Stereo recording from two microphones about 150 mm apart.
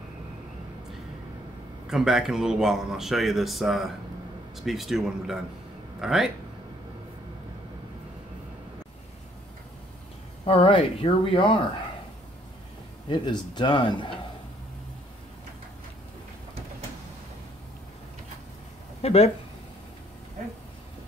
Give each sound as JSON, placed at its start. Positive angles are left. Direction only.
{"t": 1.9, "sound": "speech", "side_deg": -5}
{"t": 10.4, "sound": "speech", "side_deg": 35}
{"t": 13.1, "sound": "speech", "side_deg": 30}
{"t": 18.9, "sound": "speech", "side_deg": 45}